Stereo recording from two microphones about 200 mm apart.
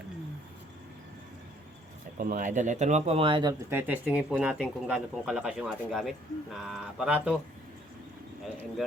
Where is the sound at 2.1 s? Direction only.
45° right (ahead or behind); by 3.5 s 25° right (ahead or behind).